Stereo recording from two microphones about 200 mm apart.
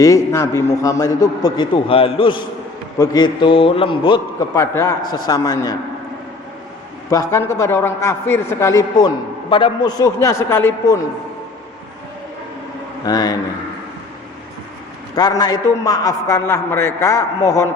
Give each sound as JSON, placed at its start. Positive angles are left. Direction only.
{"t": 0.0, "sound": "a man's voice", "side_deg": 15}
{"t": 4.6, "sound": "a man's voice", "side_deg": 15}
{"t": 7.1, "sound": "a man's voice", "side_deg": 15}
{"t": 13.1, "sound": "a man's voice", "side_deg": 20}
{"t": 15.1, "sound": "a man's voice", "side_deg": 20}